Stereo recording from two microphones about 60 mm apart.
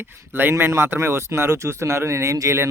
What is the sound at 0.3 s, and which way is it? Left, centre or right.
Speech, right.